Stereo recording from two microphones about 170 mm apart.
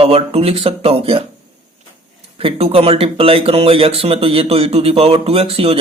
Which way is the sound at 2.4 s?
35° right (ahead or behind).